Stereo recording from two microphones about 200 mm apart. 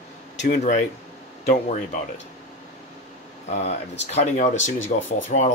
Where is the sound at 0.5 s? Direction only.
40° left (ahead or behind).